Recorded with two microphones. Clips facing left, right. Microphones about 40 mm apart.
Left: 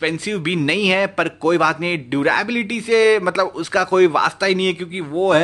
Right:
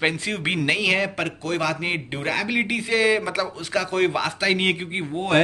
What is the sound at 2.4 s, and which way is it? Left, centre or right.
Speech, centre.